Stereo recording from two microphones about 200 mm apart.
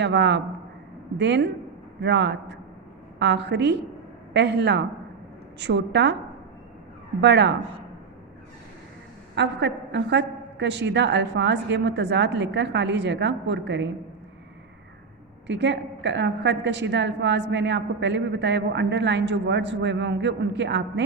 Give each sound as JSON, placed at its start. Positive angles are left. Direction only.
{"t": 0.0, "sound": "a woman's voice", "side_deg": -60}
{"t": 7.2, "sound": "a woman's voice", "side_deg": -60}
{"t": 9.3, "sound": "a woman's voice", "side_deg": -60}
{"t": 15.4, "sound": "a woman's voice", "side_deg": -60}